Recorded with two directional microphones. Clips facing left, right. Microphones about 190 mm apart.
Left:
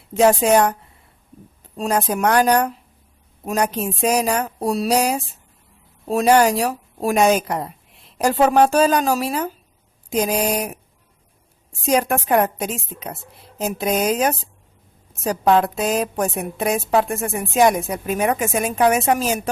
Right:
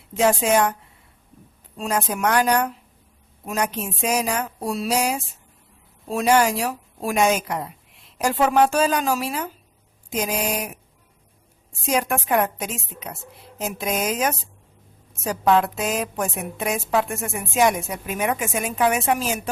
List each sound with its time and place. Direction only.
0.1 s a woman's voice: 40° left (ahead or behind)
1.8 s a woman's voice: 35° left (ahead or behind)
11.9 s a woman's voice: 35° left (ahead or behind)